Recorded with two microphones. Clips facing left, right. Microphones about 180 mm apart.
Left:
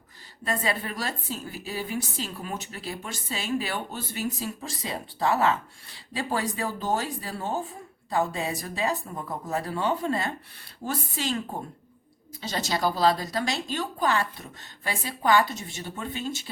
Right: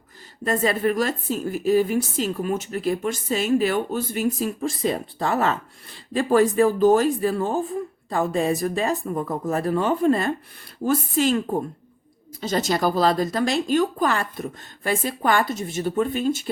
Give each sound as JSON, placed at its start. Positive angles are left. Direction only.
{"t": 0.4, "sound": "a woman's voice", "side_deg": -45}